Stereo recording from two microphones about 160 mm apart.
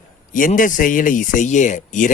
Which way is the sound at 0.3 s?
55° left (ahead or behind).